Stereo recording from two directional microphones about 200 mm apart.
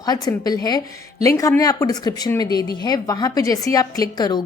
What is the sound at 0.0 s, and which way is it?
Speech, 20° left (ahead or behind).